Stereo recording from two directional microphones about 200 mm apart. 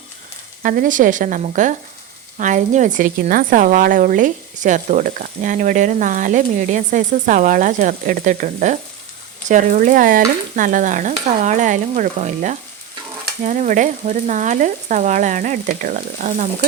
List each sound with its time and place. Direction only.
0.6 s a woman's voice: 45° right (ahead or behind)